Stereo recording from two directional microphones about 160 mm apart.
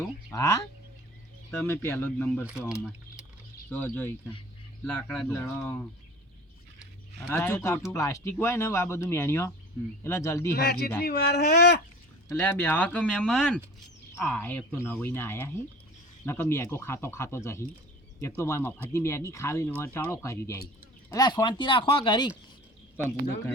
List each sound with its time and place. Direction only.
0.3 s speech: 20° left (ahead or behind)
2.5 s speech: 5° right (ahead or behind)
3.7 s speech: 10° left (ahead or behind)
7.3 s speech: 15° left (ahead or behind)
10.5 s speech: 80° left
12.3 s speech: 10° left (ahead or behind); by 22.3 s 30° left (ahead or behind)